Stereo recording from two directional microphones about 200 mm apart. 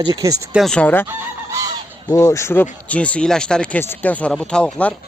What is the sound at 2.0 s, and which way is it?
Speech, 15° left (ahead or behind).